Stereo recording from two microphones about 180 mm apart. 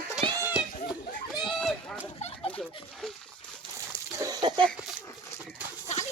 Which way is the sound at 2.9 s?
Centre (ahead or behind).